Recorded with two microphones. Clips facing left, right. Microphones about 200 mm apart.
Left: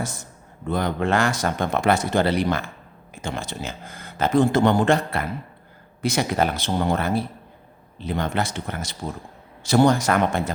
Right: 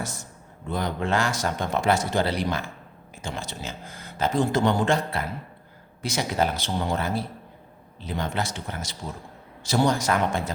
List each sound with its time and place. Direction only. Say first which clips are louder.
0.7 s speech: left 4 dB; 60° left (ahead or behind)